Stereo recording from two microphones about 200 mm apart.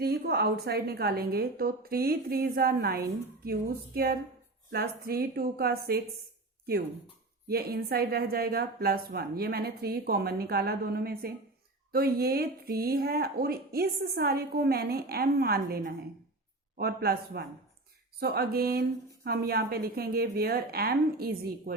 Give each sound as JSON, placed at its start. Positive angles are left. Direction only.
{"t": 0.0, "sound": "speech", "side_deg": -50}
{"t": 7.4, "sound": "speech", "side_deg": -50}